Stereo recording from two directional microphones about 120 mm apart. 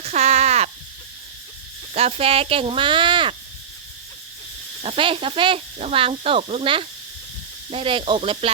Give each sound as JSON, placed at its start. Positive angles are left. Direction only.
{"t": 0.0, "sound": "a sound", "side_deg": -65}
{"t": 1.9, "sound": "speech", "side_deg": -60}
{"t": 4.8, "sound": "speech", "side_deg": -50}